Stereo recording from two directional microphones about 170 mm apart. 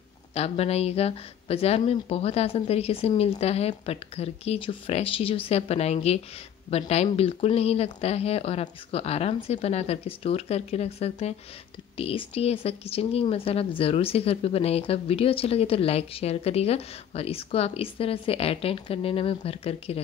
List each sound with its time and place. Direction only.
0.3 s a woman's voice: 35° left (ahead or behind)